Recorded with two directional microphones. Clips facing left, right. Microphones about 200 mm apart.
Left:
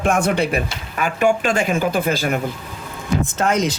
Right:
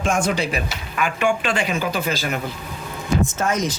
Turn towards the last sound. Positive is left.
turn(degrees=65)  # may be behind; listen again after turning